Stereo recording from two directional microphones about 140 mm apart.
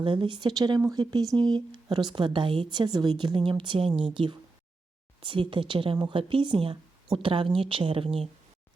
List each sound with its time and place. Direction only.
0.0 s speech: 35° right (ahead or behind)
3.8 s a woman's voice: 5° right (ahead or behind)
4.1 s speech: 35° right (ahead or behind)